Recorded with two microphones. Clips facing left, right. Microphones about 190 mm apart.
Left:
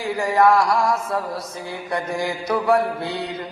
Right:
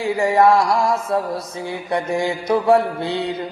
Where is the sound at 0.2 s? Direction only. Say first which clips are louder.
Right 2 dB; 25° right (ahead or behind).